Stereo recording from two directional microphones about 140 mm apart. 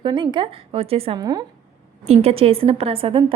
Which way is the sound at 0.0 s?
35° right (ahead or behind).